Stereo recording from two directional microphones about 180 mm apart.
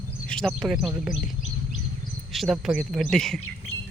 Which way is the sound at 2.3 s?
Centre (ahead or behind).